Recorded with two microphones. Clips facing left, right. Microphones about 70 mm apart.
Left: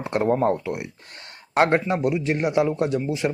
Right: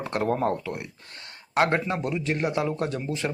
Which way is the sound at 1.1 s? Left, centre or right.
Left.